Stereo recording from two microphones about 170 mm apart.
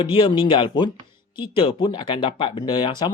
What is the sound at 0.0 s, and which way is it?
Speech, 30° left (ahead or behind).